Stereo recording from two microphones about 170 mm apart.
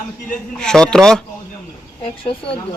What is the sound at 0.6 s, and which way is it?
Speech, 5° left (ahead or behind).